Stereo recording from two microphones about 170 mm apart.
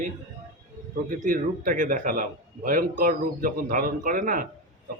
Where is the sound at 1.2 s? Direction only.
55° right (ahead or behind).